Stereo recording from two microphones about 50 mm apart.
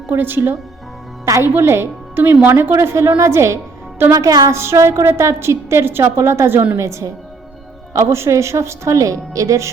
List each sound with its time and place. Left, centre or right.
0.1 s a woman's voice: right
2.1 s a woman's voice: right
6.7 s a woman's voice: right